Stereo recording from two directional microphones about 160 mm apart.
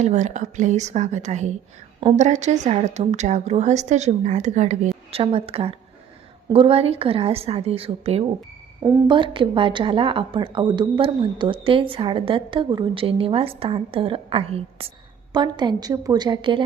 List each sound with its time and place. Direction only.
0.0 s a woman's voice: 45° right (ahead or behind)
5.1 s a woman's voice: 35° right (ahead or behind)